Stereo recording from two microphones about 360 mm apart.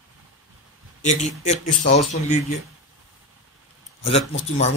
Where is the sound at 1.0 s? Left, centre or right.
Centre.